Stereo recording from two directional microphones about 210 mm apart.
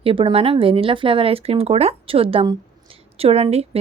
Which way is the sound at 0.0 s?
25° right (ahead or behind).